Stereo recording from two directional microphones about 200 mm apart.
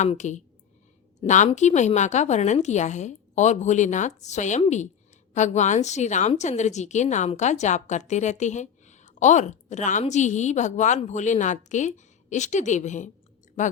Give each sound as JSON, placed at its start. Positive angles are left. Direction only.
{"t": 0.0, "sound": "a woman's voice", "side_deg": 35}